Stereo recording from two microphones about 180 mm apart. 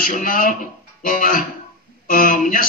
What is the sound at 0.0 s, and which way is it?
A man's voice, 50° left (ahead or behind).